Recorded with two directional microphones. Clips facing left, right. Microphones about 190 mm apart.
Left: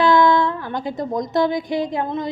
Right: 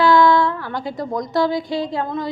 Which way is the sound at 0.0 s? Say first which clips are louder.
Right 1 dB; 20° left (ahead or behind).